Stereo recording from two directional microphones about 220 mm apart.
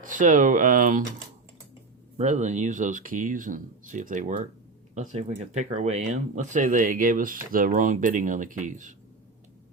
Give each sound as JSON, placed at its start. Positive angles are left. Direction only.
{"t": 0.0, "sound": "speech", "side_deg": -35}
{"t": 2.1, "sound": "speech", "side_deg": -30}
{"t": 5.5, "sound": "speech", "side_deg": -30}